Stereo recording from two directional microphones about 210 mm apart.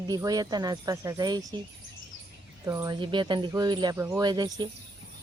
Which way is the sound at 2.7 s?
15° right (ahead or behind).